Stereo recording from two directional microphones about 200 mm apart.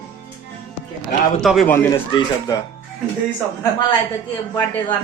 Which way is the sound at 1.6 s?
10° left (ahead or behind).